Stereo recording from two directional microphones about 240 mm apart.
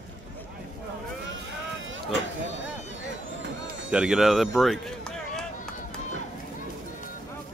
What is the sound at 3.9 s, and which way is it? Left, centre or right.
Speech, centre.